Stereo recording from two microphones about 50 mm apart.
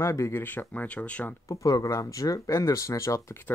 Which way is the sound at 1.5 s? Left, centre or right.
Left.